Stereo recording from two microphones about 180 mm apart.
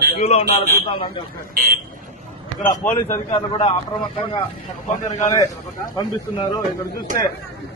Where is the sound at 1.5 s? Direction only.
55° right (ahead or behind).